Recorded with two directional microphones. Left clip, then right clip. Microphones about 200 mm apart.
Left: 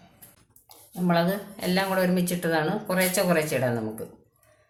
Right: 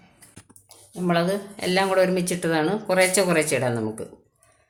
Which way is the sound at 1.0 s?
40° right (ahead or behind).